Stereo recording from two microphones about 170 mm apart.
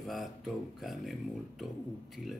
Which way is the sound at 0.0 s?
Centre (ahead or behind).